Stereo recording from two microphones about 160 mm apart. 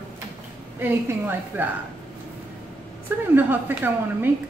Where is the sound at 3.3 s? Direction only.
10° right (ahead or behind).